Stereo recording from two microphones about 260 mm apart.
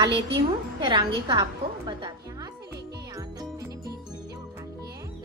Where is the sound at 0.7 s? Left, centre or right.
Centre.